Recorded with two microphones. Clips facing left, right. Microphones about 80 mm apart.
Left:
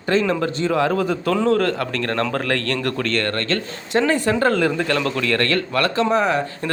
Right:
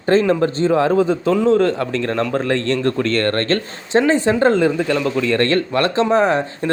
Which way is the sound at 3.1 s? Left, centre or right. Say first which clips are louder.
Right 4 dB; right.